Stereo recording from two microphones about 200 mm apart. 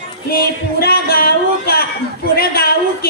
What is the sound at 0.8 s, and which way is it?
Speech, 50° left (ahead or behind).